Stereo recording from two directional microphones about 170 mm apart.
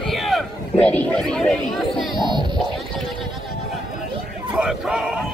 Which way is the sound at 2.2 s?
25° right (ahead or behind).